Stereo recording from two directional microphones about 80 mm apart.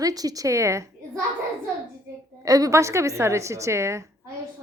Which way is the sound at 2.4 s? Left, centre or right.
Right.